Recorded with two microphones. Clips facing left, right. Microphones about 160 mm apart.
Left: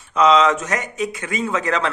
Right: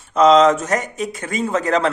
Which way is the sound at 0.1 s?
40° right (ahead or behind).